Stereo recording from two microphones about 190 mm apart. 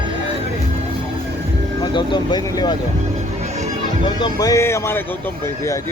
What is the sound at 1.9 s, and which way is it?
Speech, 25° left (ahead or behind).